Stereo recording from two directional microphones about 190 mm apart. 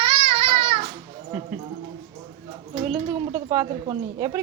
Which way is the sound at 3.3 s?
20° right (ahead or behind).